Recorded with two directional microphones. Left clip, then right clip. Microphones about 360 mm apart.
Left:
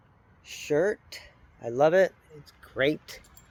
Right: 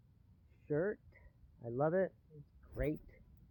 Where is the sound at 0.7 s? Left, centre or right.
Centre.